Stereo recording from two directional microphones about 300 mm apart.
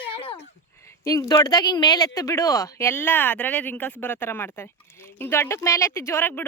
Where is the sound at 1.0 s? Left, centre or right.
Centre.